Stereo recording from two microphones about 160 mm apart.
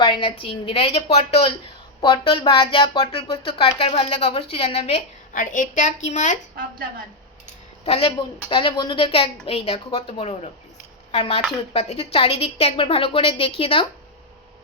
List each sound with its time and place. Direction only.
0.0 s speech: 30° left (ahead or behind)
5.3 s a woman's voice: 55° left (ahead or behind)
7.9 s speech: 35° left (ahead or behind)